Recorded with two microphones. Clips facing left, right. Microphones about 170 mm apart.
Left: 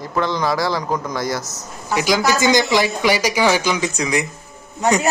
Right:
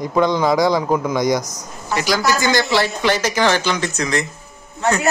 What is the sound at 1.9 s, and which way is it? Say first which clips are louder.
Speech: left 1 dB; 15° left (ahead or behind).